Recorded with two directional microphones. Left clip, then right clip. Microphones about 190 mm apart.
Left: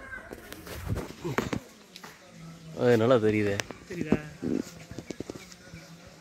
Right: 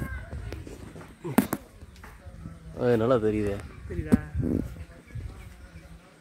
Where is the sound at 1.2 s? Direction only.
10° right (ahead or behind).